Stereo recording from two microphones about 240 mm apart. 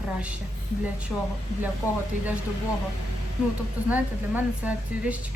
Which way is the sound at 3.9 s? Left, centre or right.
Centre.